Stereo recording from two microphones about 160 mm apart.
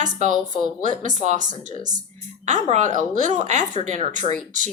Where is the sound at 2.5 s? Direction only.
50° right (ahead or behind).